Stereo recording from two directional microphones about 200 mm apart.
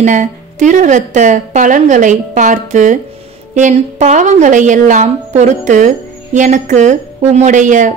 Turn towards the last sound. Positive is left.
turn(degrees=-40)  # may be behind; listen again after turning